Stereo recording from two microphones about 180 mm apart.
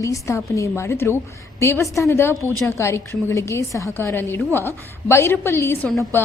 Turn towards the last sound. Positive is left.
turn(degrees=5)  # may be behind; listen again after turning